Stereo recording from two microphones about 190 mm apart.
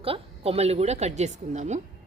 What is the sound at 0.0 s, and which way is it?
A woman's voice, 30° right (ahead or behind).